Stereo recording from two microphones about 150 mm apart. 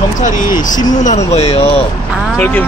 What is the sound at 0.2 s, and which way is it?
Speech, 60° left (ahead or behind).